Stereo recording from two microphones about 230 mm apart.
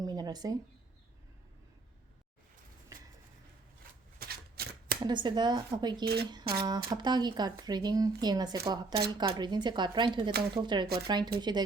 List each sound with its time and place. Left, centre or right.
0.0 s a sound: centre
4.2 s shuffling cards: right
5.0 s speech: centre